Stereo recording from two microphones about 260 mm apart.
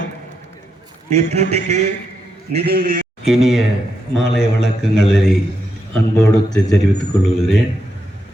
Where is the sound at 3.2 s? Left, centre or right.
Centre.